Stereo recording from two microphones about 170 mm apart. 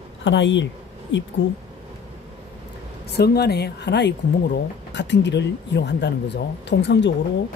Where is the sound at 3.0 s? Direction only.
70° left (ahead or behind); by 7.1 s 90° left.